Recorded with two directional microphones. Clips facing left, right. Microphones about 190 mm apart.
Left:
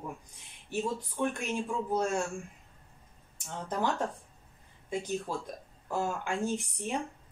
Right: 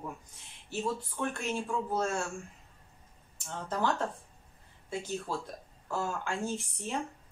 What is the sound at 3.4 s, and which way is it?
Speech, 15° left (ahead or behind).